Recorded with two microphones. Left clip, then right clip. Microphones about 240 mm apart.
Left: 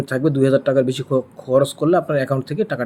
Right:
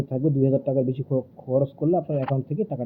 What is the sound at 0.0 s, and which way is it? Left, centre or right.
Speech, left.